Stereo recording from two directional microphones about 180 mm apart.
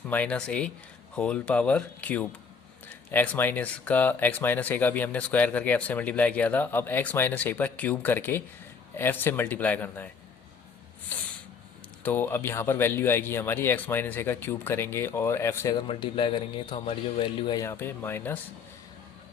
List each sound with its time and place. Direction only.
0.1 s speech: 10° left (ahead or behind)
11.1 s snort: 10° left (ahead or behind)
12.0 s speech: 10° left (ahead or behind)
15.9 s a man's voice: 30° left (ahead or behind); by 18.3 s 10° left (ahead or behind)